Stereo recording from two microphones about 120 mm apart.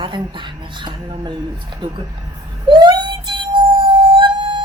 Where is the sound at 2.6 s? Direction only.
40° right (ahead or behind).